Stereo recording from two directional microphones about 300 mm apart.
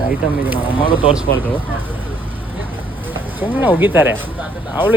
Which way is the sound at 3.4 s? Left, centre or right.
Centre.